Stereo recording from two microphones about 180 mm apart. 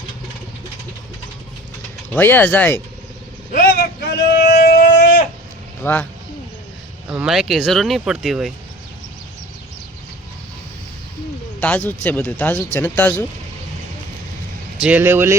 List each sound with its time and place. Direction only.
2.1 s speech: 10° left (ahead or behind)
3.5 s a sound: 55° left (ahead or behind)
5.8 s speech: 10° left (ahead or behind)
7.1 s speech: 5° right (ahead or behind)
11.6 s speech: 10° left (ahead or behind)
14.8 s speech: 10° right (ahead or behind)